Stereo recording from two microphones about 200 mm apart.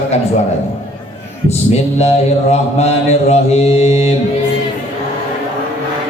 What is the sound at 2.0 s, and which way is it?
Mantra, 30° left (ahead or behind).